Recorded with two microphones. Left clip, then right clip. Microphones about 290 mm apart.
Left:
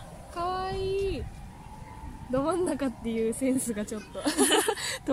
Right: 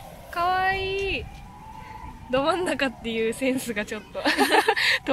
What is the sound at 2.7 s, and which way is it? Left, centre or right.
Speech, right.